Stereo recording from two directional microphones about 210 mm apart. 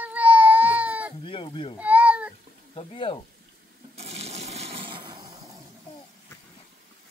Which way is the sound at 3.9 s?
30° right (ahead or behind).